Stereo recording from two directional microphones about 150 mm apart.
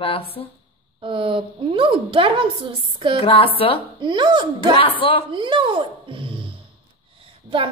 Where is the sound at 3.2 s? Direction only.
40° left (ahead or behind).